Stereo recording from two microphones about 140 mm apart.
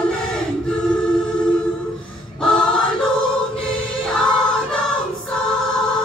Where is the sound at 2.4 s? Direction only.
5° left (ahead or behind).